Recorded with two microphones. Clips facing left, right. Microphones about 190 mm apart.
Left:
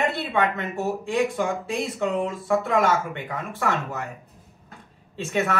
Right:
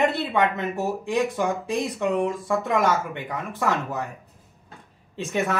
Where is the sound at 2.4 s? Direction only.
15° right (ahead or behind).